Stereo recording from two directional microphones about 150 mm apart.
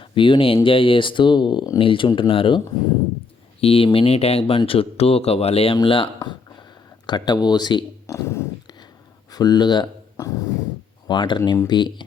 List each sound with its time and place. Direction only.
0.0 s speech: 35° left (ahead or behind)
3.6 s speech: 40° left (ahead or behind)
7.1 s speech: 30° left (ahead or behind)
8.0 s a sound: 20° left (ahead or behind)
9.3 s speech: 25° left (ahead or behind)